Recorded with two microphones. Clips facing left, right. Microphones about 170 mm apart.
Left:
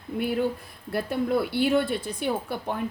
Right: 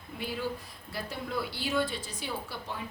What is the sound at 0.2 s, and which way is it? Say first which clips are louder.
Speech: left 9 dB; 55° left (ahead or behind).